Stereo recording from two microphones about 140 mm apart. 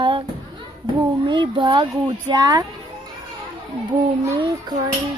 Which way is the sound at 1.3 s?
35° right (ahead or behind).